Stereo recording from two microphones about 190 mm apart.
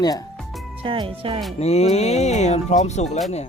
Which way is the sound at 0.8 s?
30° right (ahead or behind).